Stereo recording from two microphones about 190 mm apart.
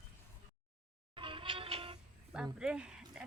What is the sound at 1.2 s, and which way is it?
Music, 25° right (ahead or behind).